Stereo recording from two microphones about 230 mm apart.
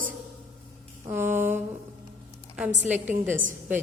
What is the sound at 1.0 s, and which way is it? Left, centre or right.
Speech, centre.